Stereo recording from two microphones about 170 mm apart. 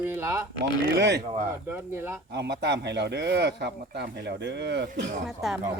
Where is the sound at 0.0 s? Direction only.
15° right (ahead or behind).